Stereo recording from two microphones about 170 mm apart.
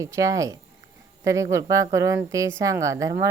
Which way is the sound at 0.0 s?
20° right (ahead or behind).